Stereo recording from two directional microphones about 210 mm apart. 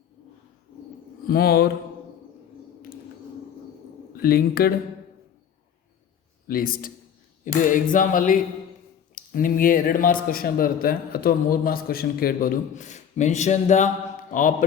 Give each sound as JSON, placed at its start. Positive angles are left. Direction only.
{"t": 1.3, "sound": "a man's voice", "side_deg": 45}
{"t": 4.2, "sound": "a man's voice", "side_deg": 45}
{"t": 6.5, "sound": "a man's voice", "side_deg": 45}